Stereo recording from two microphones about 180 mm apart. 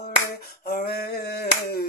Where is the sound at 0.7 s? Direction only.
55° left (ahead or behind).